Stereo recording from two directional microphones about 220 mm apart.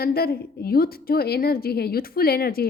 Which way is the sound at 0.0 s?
45° left (ahead or behind).